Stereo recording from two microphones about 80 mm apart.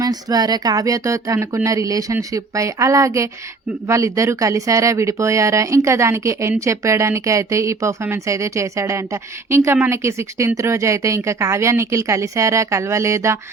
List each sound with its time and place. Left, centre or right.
0.0 s speech: right